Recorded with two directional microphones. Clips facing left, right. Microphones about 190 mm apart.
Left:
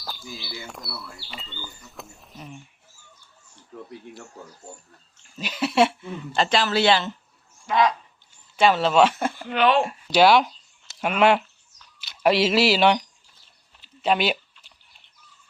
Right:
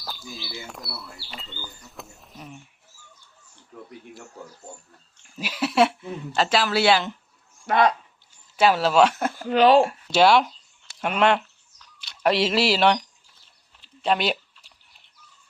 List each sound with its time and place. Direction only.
1.3 s a woman's voice: centre (ahead or behind)
5.4 s a woman's voice: 5° right (ahead or behind)
7.7 s speech: 55° right (ahead or behind)
8.5 s a woman's voice: 5° right (ahead or behind)
9.4 s speech: 40° right (ahead or behind)
9.8 s a woman's voice: centre (ahead or behind)
13.8 s a sound: 5° left (ahead or behind)